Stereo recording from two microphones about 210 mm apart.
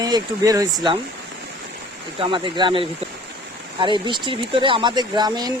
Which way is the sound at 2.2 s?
25° right (ahead or behind).